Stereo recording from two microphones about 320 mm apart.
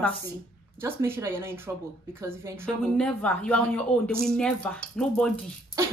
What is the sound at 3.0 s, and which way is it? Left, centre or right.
Speech, centre.